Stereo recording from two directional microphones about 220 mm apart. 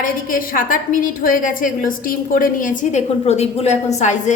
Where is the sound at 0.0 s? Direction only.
40° left (ahead or behind).